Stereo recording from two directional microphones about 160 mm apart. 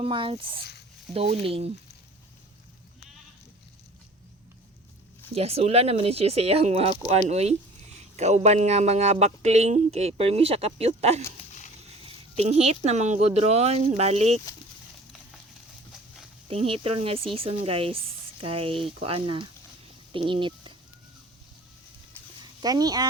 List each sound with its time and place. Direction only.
0.0 s speech: 35° right (ahead or behind)
0.6 s a sound: 90° left
1.1 s speech: 40° right (ahead or behind)
5.3 s speech: 40° right (ahead or behind)
12.4 s speech: 40° right (ahead or behind)
16.5 s speech: 35° right (ahead or behind)
22.6 s speech: 25° right (ahead or behind)